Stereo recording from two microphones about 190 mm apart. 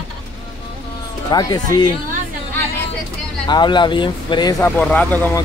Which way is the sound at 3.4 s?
25° left (ahead or behind).